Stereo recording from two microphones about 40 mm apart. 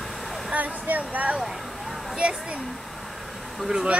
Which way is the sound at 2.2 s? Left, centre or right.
Right.